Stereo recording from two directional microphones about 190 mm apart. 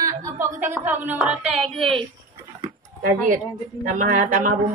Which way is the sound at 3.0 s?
45° right (ahead or behind).